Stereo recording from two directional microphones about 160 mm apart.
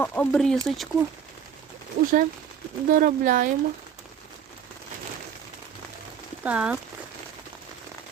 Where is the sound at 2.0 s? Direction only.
60° right (ahead or behind).